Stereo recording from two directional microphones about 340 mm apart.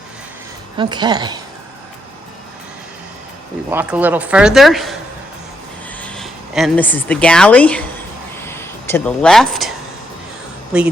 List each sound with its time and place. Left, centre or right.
0.8 s a woman's voice: centre
3.7 s speech: centre
8.4 s a sound: centre
10.7 s speech: centre